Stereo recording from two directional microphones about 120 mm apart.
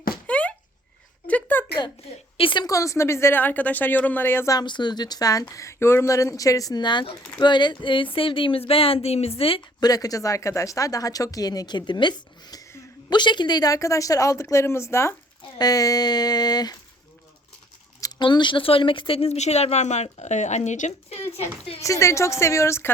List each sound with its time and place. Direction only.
0.3 s a sound: 10° left (ahead or behind)
2.4 s speech: 45° left (ahead or behind)
2.6 s speech: 25° left (ahead or behind)
4.5 s speech: 40° left (ahead or behind)
9.8 s a woman's voice: 30° left (ahead or behind)
18.2 s speech: 40° left (ahead or behind); by 21.4 s 60° left (ahead or behind)
21.8 s a woman's voice: 25° left (ahead or behind)